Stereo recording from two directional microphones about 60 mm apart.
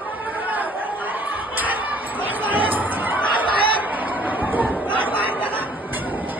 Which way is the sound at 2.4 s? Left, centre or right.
Right.